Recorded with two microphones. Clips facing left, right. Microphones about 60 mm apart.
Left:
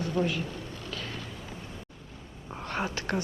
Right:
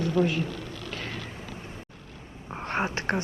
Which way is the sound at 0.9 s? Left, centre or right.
Right.